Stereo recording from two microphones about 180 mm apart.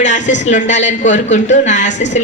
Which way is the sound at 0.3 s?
40° left (ahead or behind).